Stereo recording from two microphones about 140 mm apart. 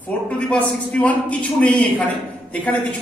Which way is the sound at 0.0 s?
10° left (ahead or behind).